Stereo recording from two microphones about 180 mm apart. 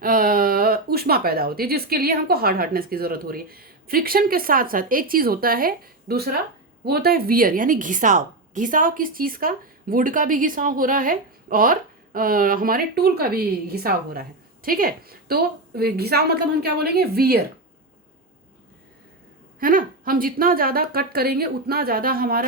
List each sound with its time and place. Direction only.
0.0 s a woman's voice: 50° right (ahead or behind)
19.5 s speech: 50° right (ahead or behind)